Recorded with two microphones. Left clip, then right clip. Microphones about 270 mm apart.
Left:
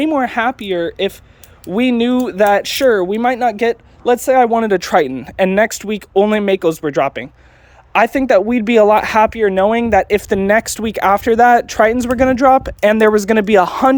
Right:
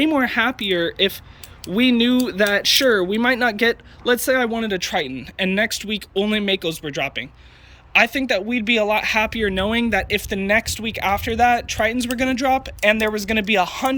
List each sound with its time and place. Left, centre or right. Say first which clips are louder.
0.0 s speech: left 3 dB; centre; by 13.9 s left